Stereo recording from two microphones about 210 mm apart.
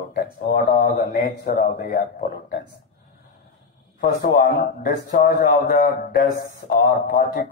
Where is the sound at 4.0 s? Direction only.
40° left (ahead or behind).